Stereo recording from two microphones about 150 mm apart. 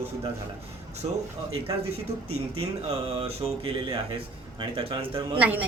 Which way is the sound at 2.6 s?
40° right (ahead or behind).